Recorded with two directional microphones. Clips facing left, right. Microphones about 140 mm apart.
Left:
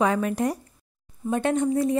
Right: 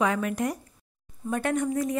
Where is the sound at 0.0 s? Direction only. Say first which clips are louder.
Left 3 dB; 30° left (ahead or behind).